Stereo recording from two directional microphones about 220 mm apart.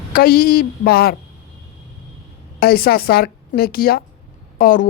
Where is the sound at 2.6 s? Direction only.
45° left (ahead or behind).